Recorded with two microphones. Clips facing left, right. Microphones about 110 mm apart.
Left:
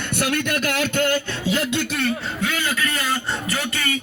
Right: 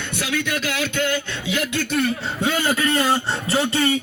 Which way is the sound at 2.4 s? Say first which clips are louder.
Right 5 dB; 40° right (ahead or behind).